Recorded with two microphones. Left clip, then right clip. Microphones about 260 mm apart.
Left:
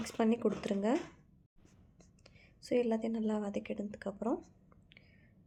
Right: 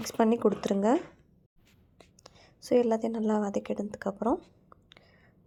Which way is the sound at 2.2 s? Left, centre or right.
Centre.